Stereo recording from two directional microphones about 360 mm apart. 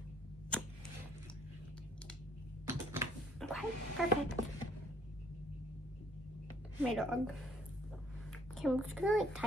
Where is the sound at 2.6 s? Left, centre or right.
Centre.